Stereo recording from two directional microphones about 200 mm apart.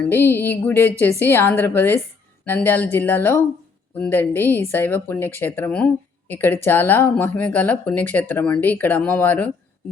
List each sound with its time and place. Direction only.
0.0 s speech: 10° left (ahead or behind)